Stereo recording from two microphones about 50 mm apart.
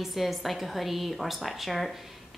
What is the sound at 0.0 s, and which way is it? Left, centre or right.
A woman's voice, centre.